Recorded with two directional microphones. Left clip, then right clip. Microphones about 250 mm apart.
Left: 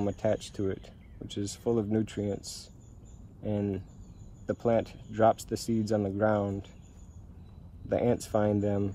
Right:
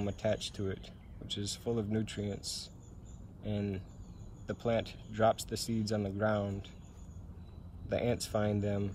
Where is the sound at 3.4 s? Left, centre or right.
Left.